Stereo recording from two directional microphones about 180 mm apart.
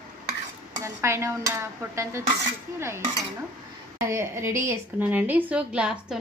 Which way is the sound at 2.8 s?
15° right (ahead or behind).